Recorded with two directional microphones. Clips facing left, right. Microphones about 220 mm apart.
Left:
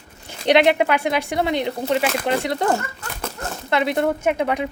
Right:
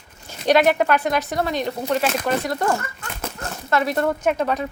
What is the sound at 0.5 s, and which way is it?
Speech, 15° left (ahead or behind).